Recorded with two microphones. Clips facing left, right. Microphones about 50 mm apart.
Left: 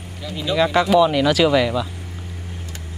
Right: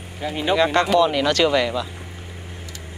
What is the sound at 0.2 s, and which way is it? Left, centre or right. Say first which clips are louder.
Speech: right 3 dB; right.